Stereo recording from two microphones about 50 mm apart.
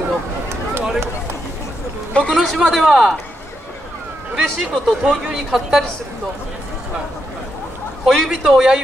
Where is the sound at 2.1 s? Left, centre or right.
Left.